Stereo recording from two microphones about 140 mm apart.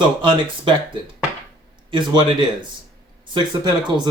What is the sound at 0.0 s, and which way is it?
Speech, 35° right (ahead or behind).